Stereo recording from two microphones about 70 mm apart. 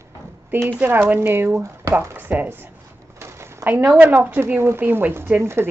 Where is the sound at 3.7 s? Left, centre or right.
Right.